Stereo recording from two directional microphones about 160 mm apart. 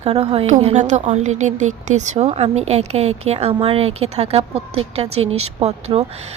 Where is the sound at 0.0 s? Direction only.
40° right (ahead or behind).